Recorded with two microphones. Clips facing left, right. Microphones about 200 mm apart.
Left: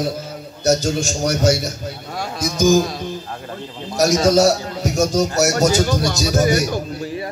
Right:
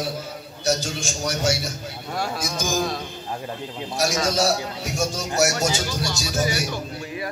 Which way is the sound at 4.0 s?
40° left (ahead or behind).